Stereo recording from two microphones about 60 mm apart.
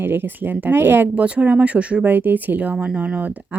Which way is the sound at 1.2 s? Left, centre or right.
Right.